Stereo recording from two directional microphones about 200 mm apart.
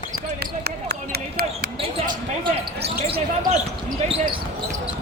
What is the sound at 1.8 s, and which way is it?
Basketball bounce, 25° right (ahead or behind).